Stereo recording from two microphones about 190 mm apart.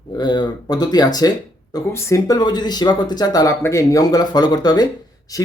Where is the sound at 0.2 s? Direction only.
20° left (ahead or behind).